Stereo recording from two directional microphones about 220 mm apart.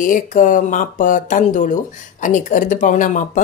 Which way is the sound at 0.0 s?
35° left (ahead or behind).